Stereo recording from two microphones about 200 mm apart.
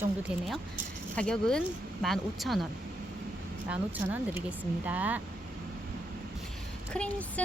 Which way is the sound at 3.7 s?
10° right (ahead or behind).